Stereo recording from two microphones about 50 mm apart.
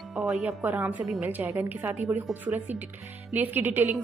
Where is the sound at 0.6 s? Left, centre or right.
Right.